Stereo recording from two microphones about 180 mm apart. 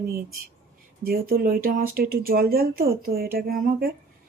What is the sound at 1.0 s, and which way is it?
Speech, 55° right (ahead or behind).